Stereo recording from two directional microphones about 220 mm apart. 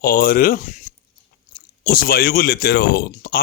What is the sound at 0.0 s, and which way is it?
Speech, 40° left (ahead or behind).